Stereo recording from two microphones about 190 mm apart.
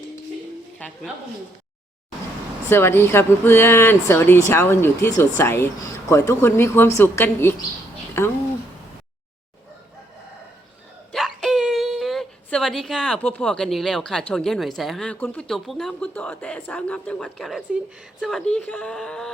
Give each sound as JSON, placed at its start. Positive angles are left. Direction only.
{"t": 2.6, "sound": "speech", "side_deg": 10}
{"t": 11.1, "sound": "a sound", "side_deg": 0}
{"t": 14.8, "sound": "speech", "side_deg": 0}